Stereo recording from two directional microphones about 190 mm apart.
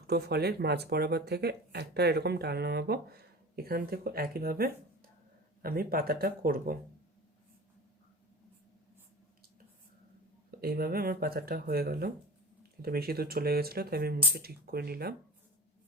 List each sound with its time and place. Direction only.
0.1 s speech: 60° right (ahead or behind)
10.6 s speech: 50° right (ahead or behind)